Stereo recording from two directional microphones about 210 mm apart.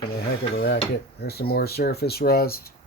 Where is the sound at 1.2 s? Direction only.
50° left (ahead or behind).